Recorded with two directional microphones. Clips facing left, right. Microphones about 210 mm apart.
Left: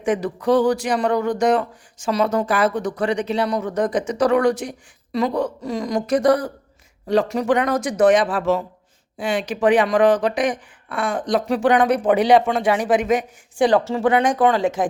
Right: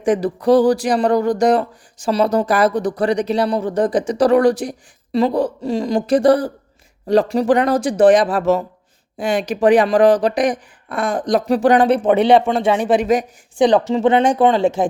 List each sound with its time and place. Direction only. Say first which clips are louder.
0.0 s speech: right 4 dB; 35° right (ahead or behind)
13.6 s speech: right 3 dB; 20° right (ahead or behind)